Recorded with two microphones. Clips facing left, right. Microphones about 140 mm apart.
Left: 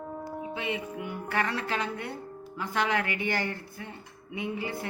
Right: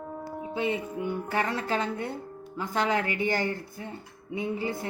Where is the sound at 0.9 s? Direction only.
30° right (ahead or behind).